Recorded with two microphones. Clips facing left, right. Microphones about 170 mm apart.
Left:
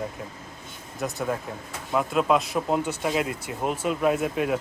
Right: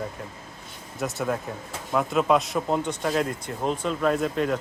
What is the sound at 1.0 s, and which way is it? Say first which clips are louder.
A man's voice: right 1 dB; centre (ahead or behind).